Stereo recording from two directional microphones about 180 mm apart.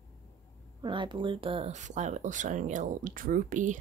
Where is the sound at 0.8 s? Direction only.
25° right (ahead or behind).